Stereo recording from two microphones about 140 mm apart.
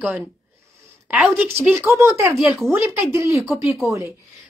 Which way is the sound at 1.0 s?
10° right (ahead or behind).